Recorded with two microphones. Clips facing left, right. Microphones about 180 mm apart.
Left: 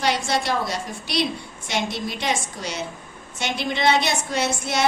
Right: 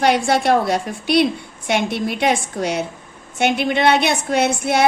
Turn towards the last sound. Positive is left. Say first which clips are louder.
# right 7 dB
turn(degrees=-60)  # may be behind; listen again after turning